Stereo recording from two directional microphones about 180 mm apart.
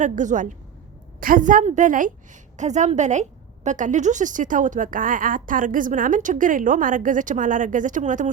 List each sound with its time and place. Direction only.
0.0 s a woman's voice: 45° right (ahead or behind)